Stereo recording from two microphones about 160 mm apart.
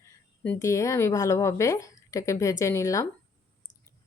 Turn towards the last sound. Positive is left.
turn(degrees=20)  # may be behind; listen again after turning